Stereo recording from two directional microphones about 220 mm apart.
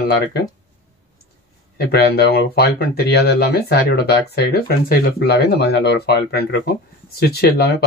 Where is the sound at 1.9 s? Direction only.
45° left (ahead or behind).